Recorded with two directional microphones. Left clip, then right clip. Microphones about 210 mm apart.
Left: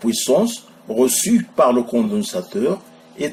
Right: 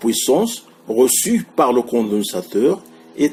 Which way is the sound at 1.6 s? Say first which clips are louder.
Even; 40° right (ahead or behind).